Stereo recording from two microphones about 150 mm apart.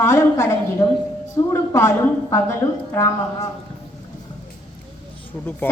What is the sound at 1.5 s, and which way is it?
A woman's voice, 20° left (ahead or behind).